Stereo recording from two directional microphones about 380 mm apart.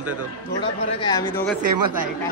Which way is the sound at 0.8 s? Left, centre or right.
Centre.